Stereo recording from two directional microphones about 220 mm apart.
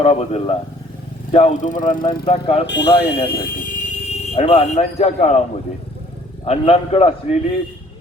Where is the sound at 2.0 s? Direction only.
25° left (ahead or behind).